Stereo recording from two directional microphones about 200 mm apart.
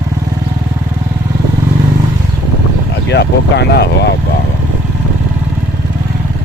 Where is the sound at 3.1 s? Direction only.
55° left (ahead or behind).